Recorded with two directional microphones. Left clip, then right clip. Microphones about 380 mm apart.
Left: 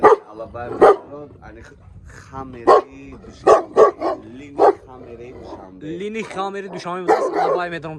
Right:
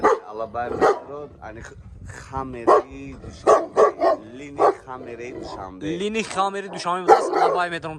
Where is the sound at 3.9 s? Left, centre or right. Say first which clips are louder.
Right 4 dB; right.